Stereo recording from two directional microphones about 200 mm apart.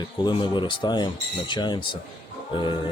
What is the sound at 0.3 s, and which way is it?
Speech, 25° left (ahead or behind).